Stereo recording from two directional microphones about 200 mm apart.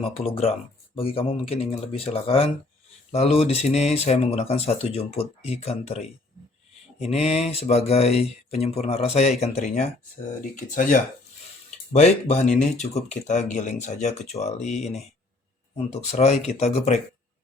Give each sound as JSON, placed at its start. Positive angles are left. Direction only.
{"t": 0.0, "sound": "speech", "side_deg": 30}
{"t": 16.1, "sound": "speech", "side_deg": 30}